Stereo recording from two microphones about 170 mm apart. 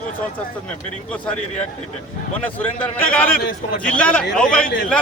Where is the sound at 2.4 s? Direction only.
10° left (ahead or behind).